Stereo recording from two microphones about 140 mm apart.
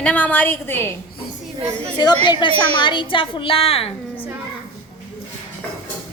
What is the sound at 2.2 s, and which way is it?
A woman's voice, 35° left (ahead or behind).